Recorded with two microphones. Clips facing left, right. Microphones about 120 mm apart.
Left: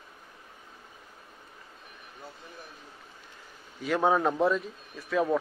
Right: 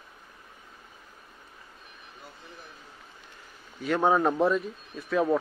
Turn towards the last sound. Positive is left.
turn(degrees=0)  # may be behind; listen again after turning